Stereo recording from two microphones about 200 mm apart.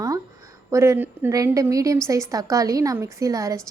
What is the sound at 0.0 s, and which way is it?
A woman's voice, 15° right (ahead or behind).